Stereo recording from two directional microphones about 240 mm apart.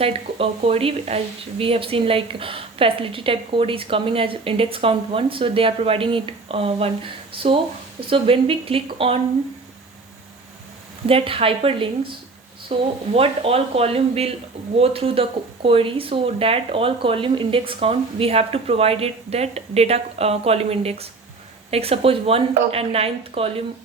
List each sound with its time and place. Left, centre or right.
0.0 s speech: right
11.0 s speech: right